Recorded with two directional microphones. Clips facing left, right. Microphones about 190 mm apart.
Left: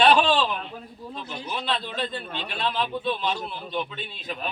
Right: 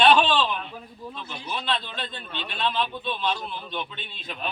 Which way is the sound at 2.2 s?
45° left (ahead or behind).